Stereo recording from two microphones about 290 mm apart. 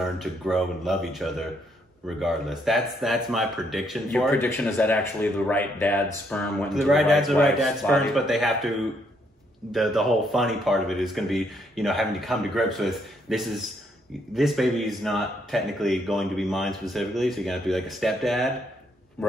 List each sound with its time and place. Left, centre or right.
0.0 s speech: centre